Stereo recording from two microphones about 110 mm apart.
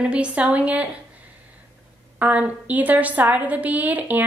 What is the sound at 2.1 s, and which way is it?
A woman's voice, 15° right (ahead or behind).